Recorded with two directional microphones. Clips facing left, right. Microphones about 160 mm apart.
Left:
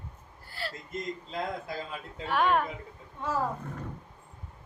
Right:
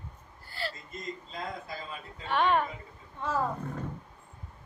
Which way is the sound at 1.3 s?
90° left.